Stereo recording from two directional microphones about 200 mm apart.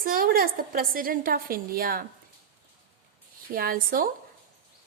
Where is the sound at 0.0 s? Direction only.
45° right (ahead or behind).